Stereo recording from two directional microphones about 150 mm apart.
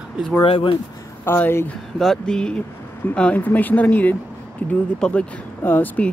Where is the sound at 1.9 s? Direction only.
5° left (ahead or behind).